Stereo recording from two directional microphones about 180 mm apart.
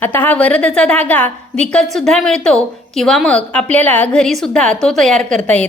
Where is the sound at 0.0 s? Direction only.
10° left (ahead or behind).